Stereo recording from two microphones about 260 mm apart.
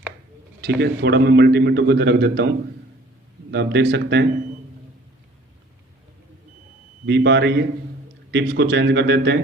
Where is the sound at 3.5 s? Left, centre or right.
Right.